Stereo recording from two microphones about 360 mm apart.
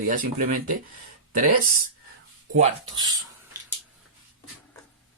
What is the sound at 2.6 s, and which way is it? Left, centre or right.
Speech, centre.